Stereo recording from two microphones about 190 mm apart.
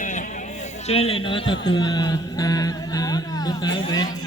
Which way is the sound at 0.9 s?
30° left (ahead or behind).